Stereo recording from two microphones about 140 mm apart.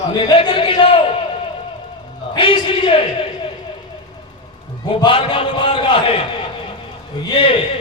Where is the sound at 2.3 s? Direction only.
40° left (ahead or behind).